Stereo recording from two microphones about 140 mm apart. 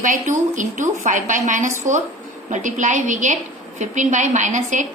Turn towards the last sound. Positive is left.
turn(degrees=-60)  # may be behind; listen again after turning